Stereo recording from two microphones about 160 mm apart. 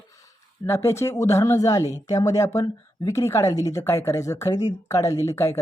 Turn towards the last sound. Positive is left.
turn(degrees=15)  # may be behind; listen again after turning